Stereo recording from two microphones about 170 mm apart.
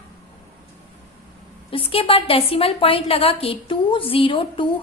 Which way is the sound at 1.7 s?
35° left (ahead or behind).